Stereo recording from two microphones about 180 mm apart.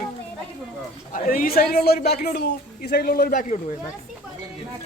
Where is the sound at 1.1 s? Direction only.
55° left (ahead or behind).